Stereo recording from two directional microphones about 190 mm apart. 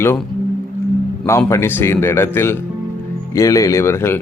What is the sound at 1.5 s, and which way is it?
Speech, 10° left (ahead or behind).